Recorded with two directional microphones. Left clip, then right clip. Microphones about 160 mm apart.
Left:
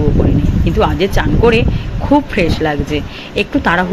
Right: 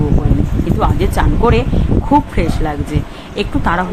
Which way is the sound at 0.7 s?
10° left (ahead or behind).